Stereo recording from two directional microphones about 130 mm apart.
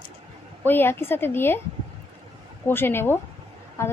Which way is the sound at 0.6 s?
15° left (ahead or behind).